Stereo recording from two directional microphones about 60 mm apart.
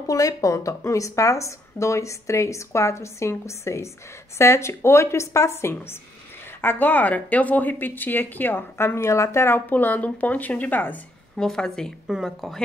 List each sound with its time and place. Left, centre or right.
0.0 s a woman's voice: left
6.6 s speech: left
9.7 s a woman's voice: left
11.3 s a woman's voice: centre